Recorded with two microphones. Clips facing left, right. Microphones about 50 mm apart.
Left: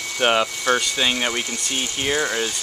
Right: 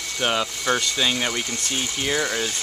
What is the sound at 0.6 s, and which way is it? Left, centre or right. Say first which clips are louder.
Speech: left 2 dB; centre.